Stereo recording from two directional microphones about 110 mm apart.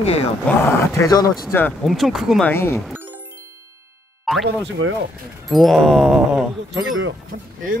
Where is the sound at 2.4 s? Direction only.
20° left (ahead or behind).